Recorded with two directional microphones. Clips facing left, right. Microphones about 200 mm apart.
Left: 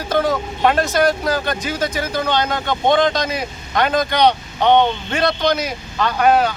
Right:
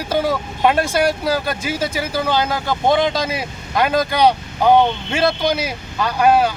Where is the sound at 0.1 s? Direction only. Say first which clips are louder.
Left 1 dB; 10° right (ahead or behind).